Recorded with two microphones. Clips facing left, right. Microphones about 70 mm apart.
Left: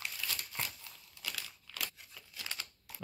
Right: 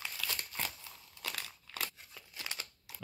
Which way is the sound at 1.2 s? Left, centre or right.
Right.